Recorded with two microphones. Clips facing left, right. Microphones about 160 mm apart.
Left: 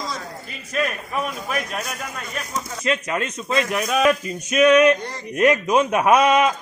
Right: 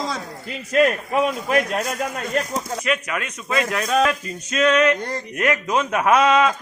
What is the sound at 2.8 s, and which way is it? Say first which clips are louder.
Speech: left 6 dB; 25° left (ahead or behind).